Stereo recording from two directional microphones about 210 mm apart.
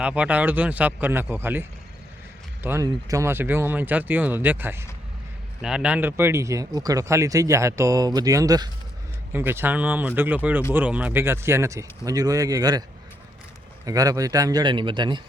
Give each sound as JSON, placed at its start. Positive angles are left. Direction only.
{"t": 0.0, "sound": "speech", "side_deg": -5}
{"t": 2.6, "sound": "speech", "side_deg": -15}
{"t": 13.8, "sound": "speech", "side_deg": -15}